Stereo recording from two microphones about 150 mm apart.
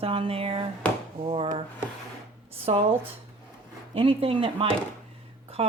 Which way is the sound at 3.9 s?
40° right (ahead or behind).